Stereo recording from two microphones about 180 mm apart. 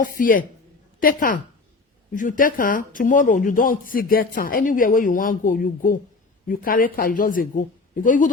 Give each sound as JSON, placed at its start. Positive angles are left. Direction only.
{"t": 0.0, "sound": "a woman's voice", "side_deg": 50}